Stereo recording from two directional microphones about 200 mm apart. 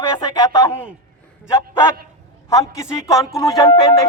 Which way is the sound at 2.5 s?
15° left (ahead or behind).